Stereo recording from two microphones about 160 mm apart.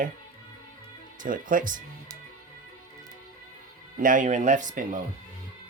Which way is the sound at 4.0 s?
55° right (ahead or behind).